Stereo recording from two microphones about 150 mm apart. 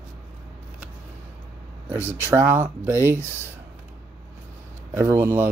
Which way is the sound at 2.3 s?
15° right (ahead or behind).